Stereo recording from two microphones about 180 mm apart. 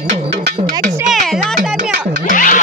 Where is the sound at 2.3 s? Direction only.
45° left (ahead or behind).